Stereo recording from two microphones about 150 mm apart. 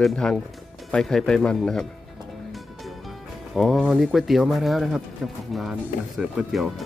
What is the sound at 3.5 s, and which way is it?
Speech, centre (ahead or behind).